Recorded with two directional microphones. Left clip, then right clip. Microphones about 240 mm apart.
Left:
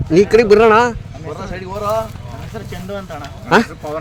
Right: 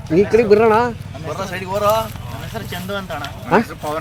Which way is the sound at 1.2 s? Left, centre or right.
Right.